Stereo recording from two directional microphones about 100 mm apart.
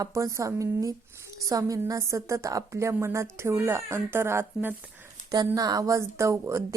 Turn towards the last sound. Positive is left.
turn(degrees=-30)  # may be behind; listen again after turning